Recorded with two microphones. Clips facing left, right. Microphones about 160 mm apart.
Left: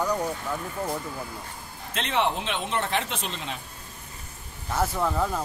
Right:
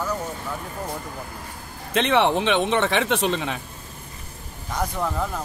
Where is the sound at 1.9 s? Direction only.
70° right (ahead or behind).